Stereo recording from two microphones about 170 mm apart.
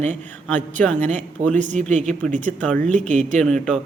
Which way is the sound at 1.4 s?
45° right (ahead or behind).